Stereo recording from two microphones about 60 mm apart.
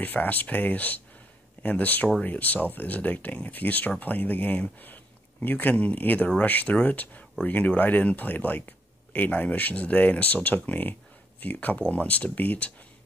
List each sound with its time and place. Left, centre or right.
0.0 s speech: left